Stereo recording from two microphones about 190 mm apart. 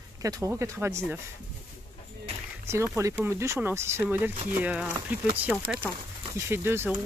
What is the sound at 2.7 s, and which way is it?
Speech, 15° right (ahead or behind).